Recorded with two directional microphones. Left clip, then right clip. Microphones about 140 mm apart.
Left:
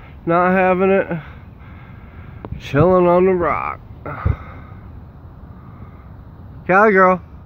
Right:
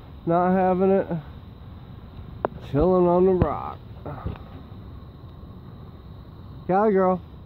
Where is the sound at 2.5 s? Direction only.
20° left (ahead or behind).